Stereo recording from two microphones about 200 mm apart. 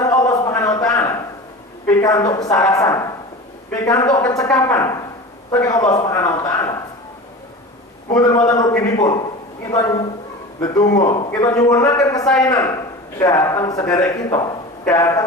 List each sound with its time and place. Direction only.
0.0 s a sound: 20° left (ahead or behind)
1.9 s a man's voice: 15° left (ahead or behind)
8.1 s a man's voice: 20° left (ahead or behind)